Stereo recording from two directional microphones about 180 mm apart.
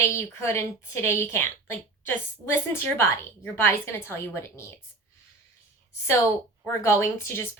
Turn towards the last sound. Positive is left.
turn(degrees=15)  # may be behind; listen again after turning